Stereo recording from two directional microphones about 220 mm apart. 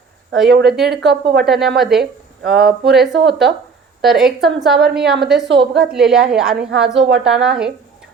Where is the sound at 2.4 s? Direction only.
45° right (ahead or behind).